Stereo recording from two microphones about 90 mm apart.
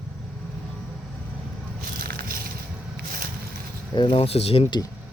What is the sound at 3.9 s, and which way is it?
Speech, 65° left (ahead or behind).